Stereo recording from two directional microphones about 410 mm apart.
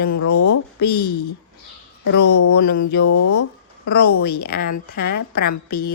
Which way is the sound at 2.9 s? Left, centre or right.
Left.